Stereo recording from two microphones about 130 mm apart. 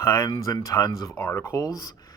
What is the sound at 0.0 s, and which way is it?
Speech, 25° left (ahead or behind).